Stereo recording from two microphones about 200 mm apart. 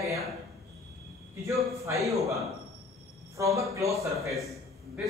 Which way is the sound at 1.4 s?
15° right (ahead or behind).